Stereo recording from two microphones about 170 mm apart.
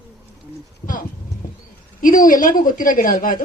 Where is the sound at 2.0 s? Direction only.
55° left (ahead or behind).